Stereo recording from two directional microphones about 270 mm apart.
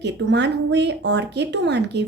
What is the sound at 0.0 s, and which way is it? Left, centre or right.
Speech, right.